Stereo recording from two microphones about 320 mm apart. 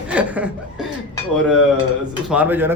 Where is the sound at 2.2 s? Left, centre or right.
Centre.